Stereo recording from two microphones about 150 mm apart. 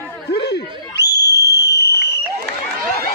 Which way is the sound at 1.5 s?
90° left.